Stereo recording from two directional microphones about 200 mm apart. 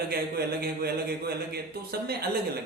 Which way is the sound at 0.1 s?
50° right (ahead or behind).